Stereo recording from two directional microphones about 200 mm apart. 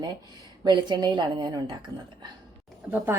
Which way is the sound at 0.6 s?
20° right (ahead or behind).